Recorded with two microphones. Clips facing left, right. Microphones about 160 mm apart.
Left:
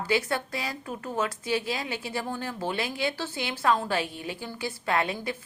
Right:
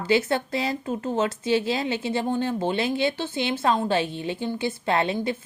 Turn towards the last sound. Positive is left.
turn(degrees=-25)  # may be behind; listen again after turning